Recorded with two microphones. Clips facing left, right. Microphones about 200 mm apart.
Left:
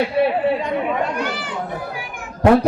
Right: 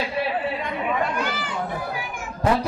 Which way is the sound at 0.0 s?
60° left (ahead or behind).